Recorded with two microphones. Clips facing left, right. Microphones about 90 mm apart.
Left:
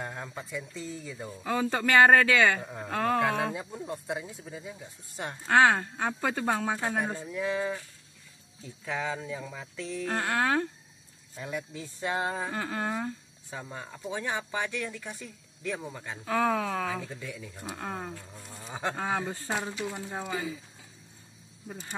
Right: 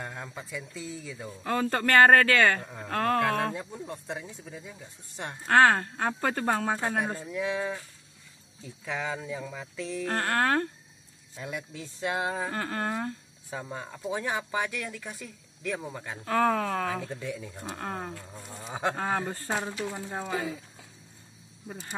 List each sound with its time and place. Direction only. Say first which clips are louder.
0.0 s speech: left 1 dB; centre (ahead or behind)
13.5 s speech: right 3 dB; 10° right (ahead or behind)
16.9 s speech: right 3 dB; 15° right (ahead or behind)
17.6 s speech: right 1 dB; centre (ahead or behind)
18.5 s speech: right 3 dB; 15° right (ahead or behind)
18.9 s speech: right 1 dB; 5° left (ahead or behind)
21.6 s speech: right 1 dB; 5° right (ahead or behind)